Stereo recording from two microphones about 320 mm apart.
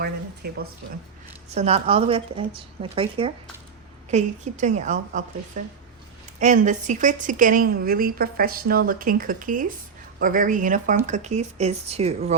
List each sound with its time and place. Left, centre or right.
0.0 s a woman's voice: right